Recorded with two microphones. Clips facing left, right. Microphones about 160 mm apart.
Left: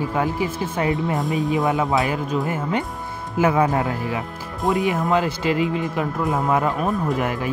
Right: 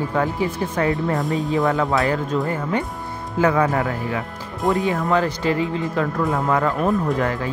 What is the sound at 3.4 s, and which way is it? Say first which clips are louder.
Speech: even; 20° left (ahead or behind).